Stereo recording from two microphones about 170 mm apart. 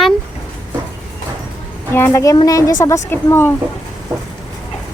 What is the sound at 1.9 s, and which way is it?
A woman's voice, 15° left (ahead or behind).